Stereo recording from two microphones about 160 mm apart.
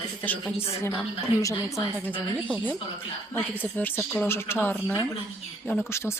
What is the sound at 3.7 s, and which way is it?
Speech, 10° left (ahead or behind).